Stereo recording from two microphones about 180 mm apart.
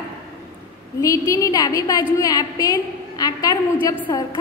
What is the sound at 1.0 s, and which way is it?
A woman's voice, 15° left (ahead or behind).